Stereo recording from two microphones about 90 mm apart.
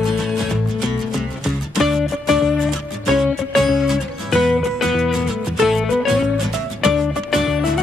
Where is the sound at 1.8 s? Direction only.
Centre (ahead or behind).